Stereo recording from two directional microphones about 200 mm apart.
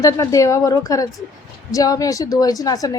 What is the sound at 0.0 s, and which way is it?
A woman's voice, 15° left (ahead or behind).